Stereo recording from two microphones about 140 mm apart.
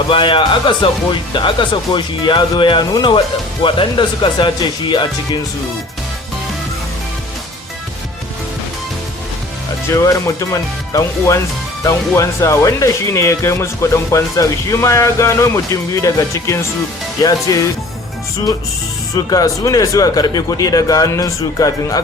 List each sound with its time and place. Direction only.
0.1 s speech: 35° left (ahead or behind)
9.9 s speech: 20° left (ahead or behind)
19.1 s speech: 25° left (ahead or behind)